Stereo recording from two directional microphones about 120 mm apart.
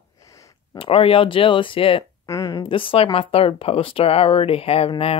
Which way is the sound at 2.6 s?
45° left (ahead or behind).